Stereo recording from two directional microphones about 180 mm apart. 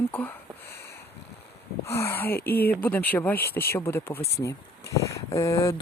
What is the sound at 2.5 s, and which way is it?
Speech, 60° left (ahead or behind).